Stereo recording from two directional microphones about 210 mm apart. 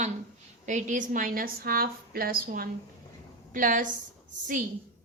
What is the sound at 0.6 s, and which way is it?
A woman's voice, 35° right (ahead or behind).